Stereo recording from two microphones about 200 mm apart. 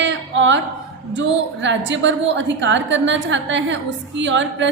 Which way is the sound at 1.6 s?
65° right (ahead or behind).